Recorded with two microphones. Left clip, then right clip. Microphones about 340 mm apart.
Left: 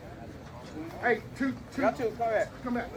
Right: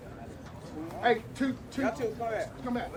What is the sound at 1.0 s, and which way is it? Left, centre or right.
Speech, centre.